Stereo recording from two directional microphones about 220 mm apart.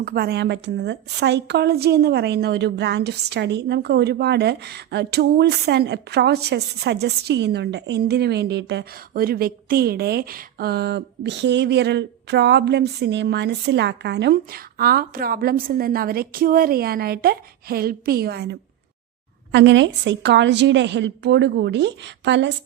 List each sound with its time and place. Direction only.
0.0 s a woman's voice: 45° right (ahead or behind)